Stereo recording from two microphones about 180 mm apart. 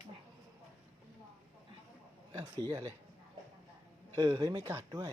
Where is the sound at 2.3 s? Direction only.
15° right (ahead or behind).